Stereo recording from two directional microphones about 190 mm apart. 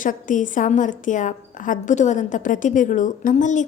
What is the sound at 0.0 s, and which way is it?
A woman's voice, 45° left (ahead or behind).